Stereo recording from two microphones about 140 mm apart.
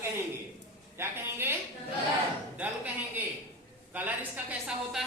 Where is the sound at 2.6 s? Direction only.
10° right (ahead or behind).